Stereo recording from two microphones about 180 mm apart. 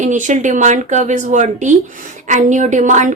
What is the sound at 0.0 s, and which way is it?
A woman's voice, 45° right (ahead or behind).